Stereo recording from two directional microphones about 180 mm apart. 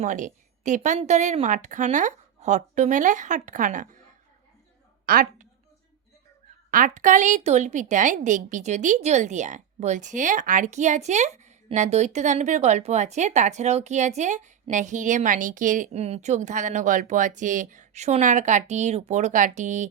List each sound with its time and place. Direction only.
0.0 s a woman's voice: 45° right (ahead or behind)
5.0 s a woman's voice: 50° right (ahead or behind)
6.7 s a woman's voice: 50° right (ahead or behind)